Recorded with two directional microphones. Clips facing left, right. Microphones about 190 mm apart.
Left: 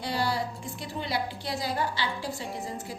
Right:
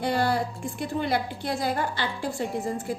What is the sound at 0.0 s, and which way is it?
A woman's voice, 55° right (ahead or behind).